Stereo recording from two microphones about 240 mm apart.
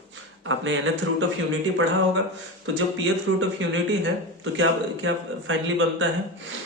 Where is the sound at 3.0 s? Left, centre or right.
Right.